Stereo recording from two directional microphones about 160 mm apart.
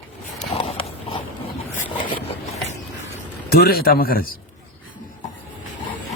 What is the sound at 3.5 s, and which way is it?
Speech, 70° left (ahead or behind).